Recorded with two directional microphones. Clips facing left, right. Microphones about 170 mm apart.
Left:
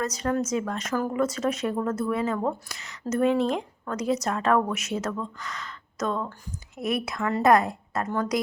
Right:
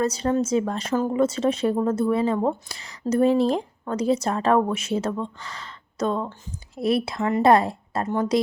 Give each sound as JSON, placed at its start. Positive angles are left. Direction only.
{"t": 0.0, "sound": "speech", "side_deg": -30}